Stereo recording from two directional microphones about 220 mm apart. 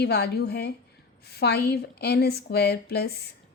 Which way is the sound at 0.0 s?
50° left (ahead or behind).